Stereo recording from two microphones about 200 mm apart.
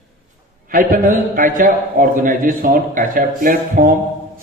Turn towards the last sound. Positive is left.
turn(degrees=-45)  # may be behind; listen again after turning